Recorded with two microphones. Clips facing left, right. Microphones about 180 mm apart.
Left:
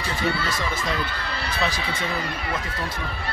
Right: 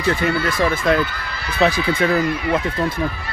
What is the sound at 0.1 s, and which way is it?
Speech, 55° right (ahead or behind).